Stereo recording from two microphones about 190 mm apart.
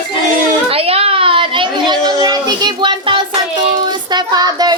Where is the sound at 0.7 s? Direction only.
30° right (ahead or behind).